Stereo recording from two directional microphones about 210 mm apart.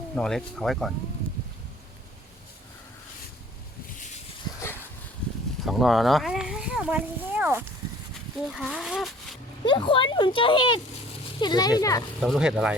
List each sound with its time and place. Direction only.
0.2 s speech: centre (ahead or behind)
1.2 s a sound: 5° left (ahead or behind)
5.6 s a sound: centre (ahead or behind)
8.5 s speech: centre (ahead or behind)
9.6 s speech: 25° left (ahead or behind)
12.2 s speech: centre (ahead or behind)